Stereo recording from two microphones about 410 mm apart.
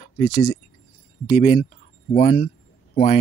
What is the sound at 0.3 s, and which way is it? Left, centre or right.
Speech, left.